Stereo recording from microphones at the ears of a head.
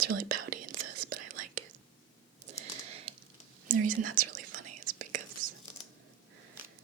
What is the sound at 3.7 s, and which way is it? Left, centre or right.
Whispering, right.